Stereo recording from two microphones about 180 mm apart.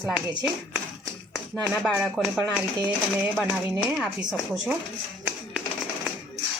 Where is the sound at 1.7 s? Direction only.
10° right (ahead or behind).